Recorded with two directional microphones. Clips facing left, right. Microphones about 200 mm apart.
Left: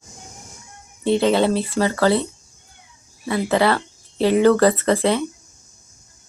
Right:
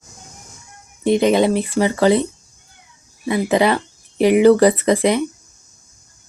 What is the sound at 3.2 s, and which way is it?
Speech, 15° right (ahead or behind).